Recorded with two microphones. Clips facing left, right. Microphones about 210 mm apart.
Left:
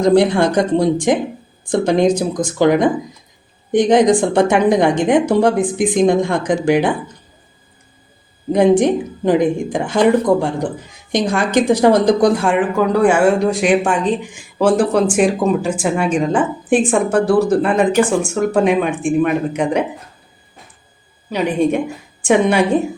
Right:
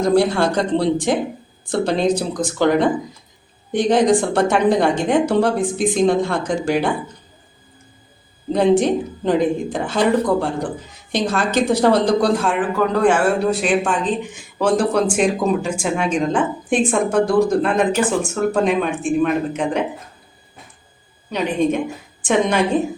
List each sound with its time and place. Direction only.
0.0 s a woman's voice: 15° left (ahead or behind)
8.5 s a woman's voice: 15° left (ahead or behind)
21.2 s a woman's voice: 10° left (ahead or behind)